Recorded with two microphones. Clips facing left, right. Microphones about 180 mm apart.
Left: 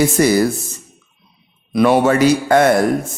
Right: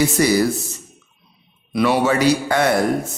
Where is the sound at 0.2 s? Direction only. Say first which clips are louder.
Left 3 dB; 50° left (ahead or behind).